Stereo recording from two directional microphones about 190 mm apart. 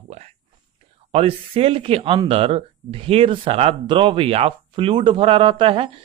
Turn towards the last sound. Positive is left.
turn(degrees=-30)  # may be behind; listen again after turning